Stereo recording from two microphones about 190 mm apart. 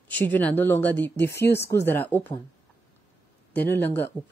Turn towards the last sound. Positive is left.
turn(degrees=10)  # may be behind; listen again after turning